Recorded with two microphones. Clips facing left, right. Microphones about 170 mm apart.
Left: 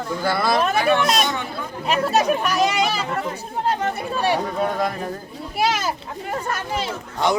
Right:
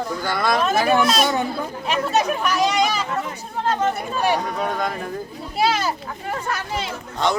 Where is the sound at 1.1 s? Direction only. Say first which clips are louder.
Right 3 dB; 40° right (ahead or behind).